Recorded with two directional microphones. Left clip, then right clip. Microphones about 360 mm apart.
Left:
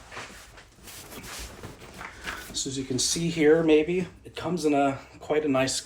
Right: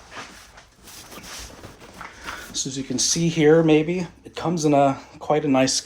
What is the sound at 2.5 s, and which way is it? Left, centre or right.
Speech, right.